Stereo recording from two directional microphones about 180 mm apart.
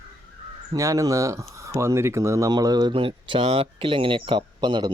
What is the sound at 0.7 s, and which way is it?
Speech, 20° right (ahead or behind).